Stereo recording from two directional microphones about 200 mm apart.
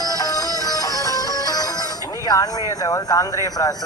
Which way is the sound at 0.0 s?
20° left (ahead or behind).